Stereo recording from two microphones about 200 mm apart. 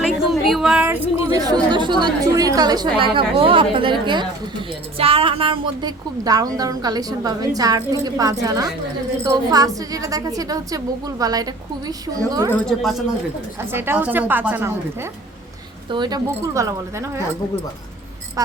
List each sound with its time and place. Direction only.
0.2 s a woman's voice: centre (ahead or behind); by 12.5 s 20° right (ahead or behind)
12.5 s speech: centre (ahead or behind)
13.6 s a woman's voice: 10° right (ahead or behind)
15.9 s a woman's voice: 20° right (ahead or behind)
18.4 s a sound: 15° right (ahead or behind)